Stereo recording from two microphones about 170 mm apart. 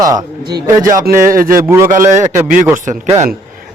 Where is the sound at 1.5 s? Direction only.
15° right (ahead or behind).